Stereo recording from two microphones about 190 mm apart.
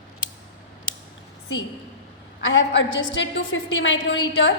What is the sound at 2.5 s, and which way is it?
A woman's voice, 80° left.